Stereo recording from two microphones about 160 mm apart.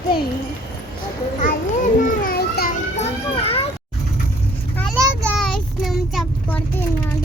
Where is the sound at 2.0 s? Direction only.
65° left (ahead or behind).